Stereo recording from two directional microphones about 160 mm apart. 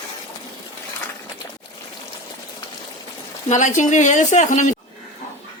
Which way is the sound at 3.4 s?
50° left (ahead or behind).